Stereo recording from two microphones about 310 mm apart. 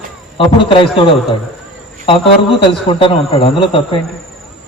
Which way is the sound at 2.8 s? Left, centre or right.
Centre.